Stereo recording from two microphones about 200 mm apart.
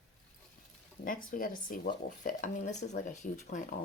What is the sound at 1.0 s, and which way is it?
Speech, 45° left (ahead or behind).